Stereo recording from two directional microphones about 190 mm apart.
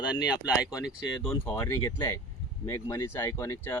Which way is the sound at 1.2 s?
5° left (ahead or behind).